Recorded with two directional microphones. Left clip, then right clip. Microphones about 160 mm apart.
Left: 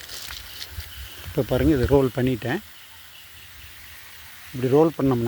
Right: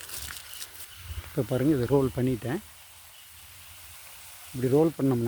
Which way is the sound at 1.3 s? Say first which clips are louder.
Left 5 dB; 10° left (ahead or behind).